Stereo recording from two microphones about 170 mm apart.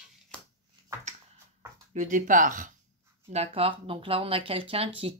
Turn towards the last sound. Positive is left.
turn(degrees=-35)  # may be behind; listen again after turning